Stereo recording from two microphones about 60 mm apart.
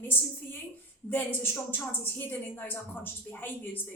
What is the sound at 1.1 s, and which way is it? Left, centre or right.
A woman's voice, left.